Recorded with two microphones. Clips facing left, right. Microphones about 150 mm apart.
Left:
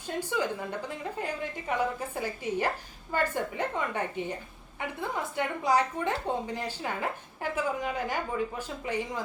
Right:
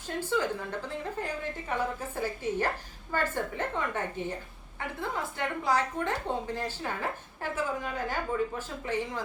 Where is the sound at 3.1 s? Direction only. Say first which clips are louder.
Left 1 dB; 15° left (ahead or behind).